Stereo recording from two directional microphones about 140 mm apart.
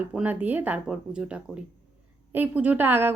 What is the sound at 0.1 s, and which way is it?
A woman's voice, 10° right (ahead or behind).